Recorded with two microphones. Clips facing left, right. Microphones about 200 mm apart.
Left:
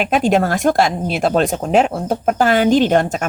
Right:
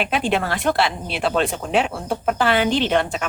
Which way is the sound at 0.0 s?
45° left (ahead or behind).